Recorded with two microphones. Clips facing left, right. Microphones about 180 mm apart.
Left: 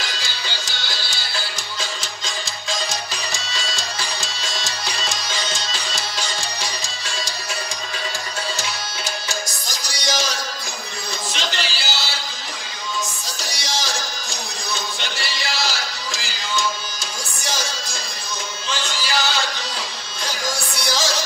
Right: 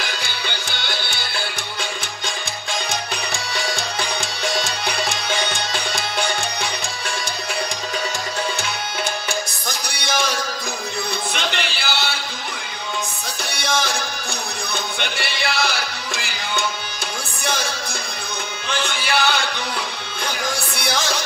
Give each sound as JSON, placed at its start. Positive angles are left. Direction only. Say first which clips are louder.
{"t": 0.0, "sound": "music", "louder": "right 3 dB", "side_deg": -60}
{"t": 9.3, "sound": "music", "louder": "right 3 dB", "side_deg": -60}
{"t": 11.3, "sound": "music", "louder": "right 2 dB", "side_deg": -60}
{"t": 13.4, "sound": "music", "louder": "right 5 dB", "side_deg": -60}